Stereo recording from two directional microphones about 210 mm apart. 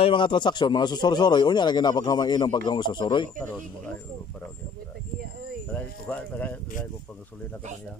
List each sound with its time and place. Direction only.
0.0 s speech: 25° left (ahead or behind)
5.7 s speech: 5° left (ahead or behind)